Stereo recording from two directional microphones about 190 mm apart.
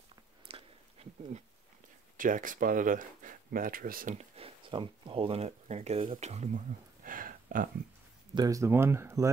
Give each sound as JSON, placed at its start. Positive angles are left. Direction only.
{"t": 0.5, "sound": "a sound", "side_deg": -30}
{"t": 2.1, "sound": "speech", "side_deg": -45}
{"t": 8.4, "sound": "speech", "side_deg": -15}